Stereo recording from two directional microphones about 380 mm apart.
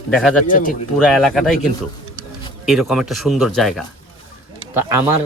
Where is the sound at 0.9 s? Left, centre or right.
Centre.